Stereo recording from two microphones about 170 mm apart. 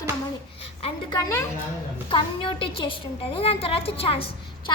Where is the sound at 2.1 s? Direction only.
30° left (ahead or behind).